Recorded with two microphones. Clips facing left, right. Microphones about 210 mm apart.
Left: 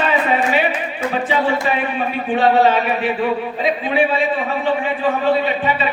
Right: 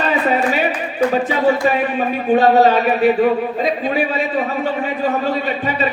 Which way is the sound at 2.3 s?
40° right (ahead or behind).